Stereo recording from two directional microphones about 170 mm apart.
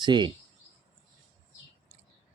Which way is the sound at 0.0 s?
25° right (ahead or behind).